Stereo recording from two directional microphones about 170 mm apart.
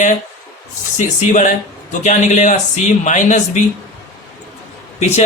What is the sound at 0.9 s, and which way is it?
Speech, 45° left (ahead or behind).